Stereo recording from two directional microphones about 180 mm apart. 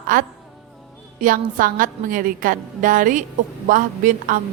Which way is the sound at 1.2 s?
50° right (ahead or behind).